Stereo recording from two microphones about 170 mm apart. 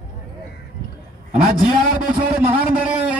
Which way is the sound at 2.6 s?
5° right (ahead or behind).